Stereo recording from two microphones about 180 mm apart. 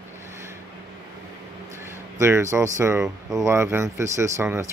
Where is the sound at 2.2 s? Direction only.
15° right (ahead or behind).